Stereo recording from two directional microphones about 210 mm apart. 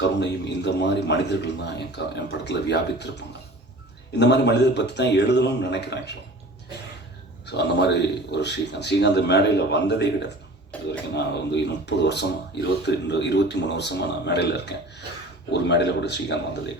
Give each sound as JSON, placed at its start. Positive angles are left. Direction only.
{"t": 0.0, "sound": "speech", "side_deg": 55}
{"t": 7.4, "sound": "speech", "side_deg": 55}
{"t": 10.7, "sound": "a sound", "side_deg": 5}
{"t": 11.1, "sound": "speech", "side_deg": 55}